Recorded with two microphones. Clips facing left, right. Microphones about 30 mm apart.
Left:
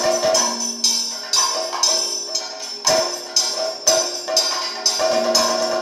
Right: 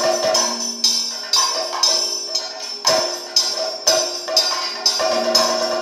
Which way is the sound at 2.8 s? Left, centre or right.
Centre.